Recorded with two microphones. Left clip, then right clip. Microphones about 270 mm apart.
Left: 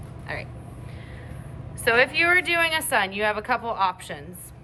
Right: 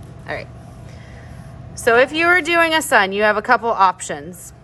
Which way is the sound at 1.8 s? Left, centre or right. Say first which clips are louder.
Right 6 dB; right.